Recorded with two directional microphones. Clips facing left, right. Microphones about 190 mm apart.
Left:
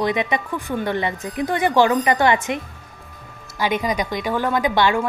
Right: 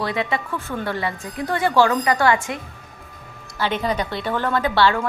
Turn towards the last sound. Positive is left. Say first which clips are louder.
# even
turn(degrees=15)  # may be behind; listen again after turning